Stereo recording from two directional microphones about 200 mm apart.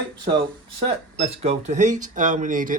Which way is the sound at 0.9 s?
30° right (ahead or behind).